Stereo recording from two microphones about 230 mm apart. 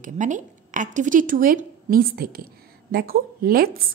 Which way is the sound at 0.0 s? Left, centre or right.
Right.